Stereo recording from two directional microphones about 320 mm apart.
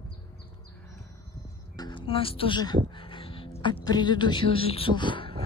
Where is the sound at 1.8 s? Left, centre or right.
Centre.